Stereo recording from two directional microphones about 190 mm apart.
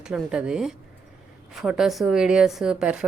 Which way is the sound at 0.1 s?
5° right (ahead or behind).